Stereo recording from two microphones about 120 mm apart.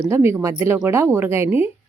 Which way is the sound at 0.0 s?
20° right (ahead or behind).